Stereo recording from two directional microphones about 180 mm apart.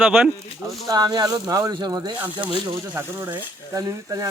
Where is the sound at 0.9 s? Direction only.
20° right (ahead or behind).